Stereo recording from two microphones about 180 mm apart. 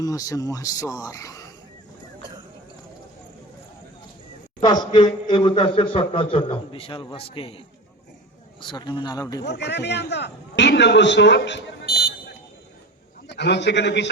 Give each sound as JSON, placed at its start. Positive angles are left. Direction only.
{"t": 0.0, "sound": "a man's voice", "side_deg": 20}
{"t": 4.6, "sound": "a man's voice", "side_deg": 25}
{"t": 8.6, "sound": "a man's voice", "side_deg": 25}
{"t": 9.4, "sound": "a man's voice", "side_deg": 70}
{"t": 13.2, "sound": "a man's voice", "side_deg": 70}